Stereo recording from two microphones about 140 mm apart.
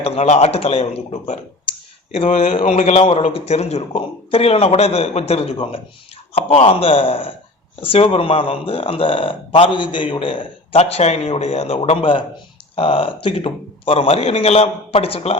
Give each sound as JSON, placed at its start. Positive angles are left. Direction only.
{"t": 0.0, "sound": "a man's voice", "side_deg": 45}
{"t": 3.0, "sound": "speech", "side_deg": 45}